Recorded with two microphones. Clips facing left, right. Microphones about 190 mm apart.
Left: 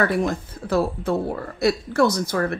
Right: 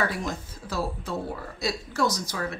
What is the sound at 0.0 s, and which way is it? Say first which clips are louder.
Speech: left 8 dB; 55° left (ahead or behind).